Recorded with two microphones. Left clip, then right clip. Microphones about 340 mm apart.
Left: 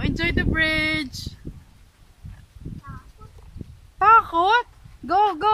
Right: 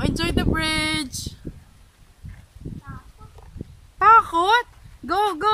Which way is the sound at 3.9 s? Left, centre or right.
Centre.